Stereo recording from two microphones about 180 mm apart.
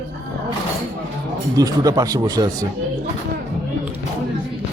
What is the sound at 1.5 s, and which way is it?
Speech, 20° right (ahead or behind).